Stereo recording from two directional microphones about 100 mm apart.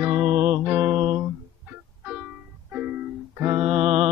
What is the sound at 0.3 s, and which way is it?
Music, 90° right.